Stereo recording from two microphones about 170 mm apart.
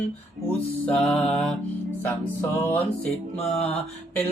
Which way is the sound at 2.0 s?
10° left (ahead or behind).